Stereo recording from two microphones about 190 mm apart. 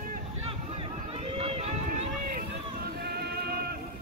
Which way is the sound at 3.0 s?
55° right (ahead or behind).